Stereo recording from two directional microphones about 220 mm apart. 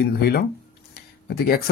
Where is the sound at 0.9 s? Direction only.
45° left (ahead or behind).